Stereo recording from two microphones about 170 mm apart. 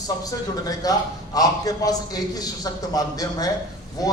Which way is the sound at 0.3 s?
20° left (ahead or behind).